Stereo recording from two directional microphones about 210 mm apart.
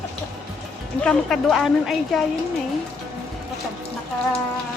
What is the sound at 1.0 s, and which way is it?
Speech, centre (ahead or behind).